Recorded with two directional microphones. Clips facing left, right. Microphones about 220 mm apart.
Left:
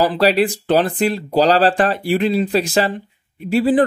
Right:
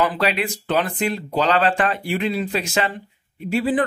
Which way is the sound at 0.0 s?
35° left (ahead or behind).